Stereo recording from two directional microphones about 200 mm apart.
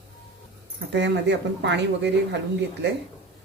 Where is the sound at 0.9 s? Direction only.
60° right (ahead or behind).